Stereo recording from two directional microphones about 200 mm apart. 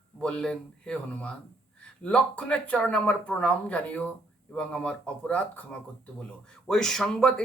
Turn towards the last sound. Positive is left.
turn(degrees=5)  # may be behind; listen again after turning